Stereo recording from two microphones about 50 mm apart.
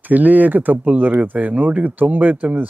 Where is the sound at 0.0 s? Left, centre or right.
Right.